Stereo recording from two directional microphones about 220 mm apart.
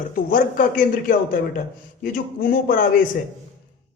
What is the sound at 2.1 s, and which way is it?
Speech, 40° left (ahead or behind).